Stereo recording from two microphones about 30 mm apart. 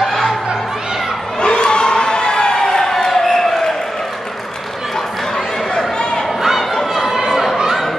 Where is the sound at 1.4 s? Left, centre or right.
Left.